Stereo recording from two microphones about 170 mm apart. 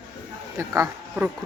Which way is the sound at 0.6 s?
15° right (ahead or behind).